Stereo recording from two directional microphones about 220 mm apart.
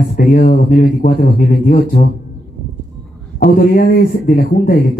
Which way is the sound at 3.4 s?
40° left (ahead or behind).